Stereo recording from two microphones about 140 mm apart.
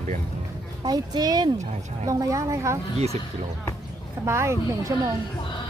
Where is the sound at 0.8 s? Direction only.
30° right (ahead or behind).